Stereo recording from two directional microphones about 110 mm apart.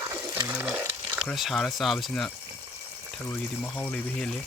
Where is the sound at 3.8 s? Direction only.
15° left (ahead or behind).